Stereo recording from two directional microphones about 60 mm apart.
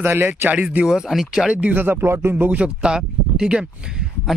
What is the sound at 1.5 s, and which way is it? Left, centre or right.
Speech, right.